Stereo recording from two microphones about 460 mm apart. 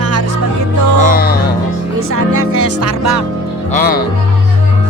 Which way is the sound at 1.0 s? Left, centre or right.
Centre.